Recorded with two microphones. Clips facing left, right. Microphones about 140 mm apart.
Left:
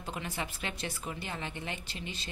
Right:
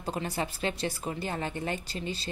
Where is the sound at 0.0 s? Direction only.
35° right (ahead or behind).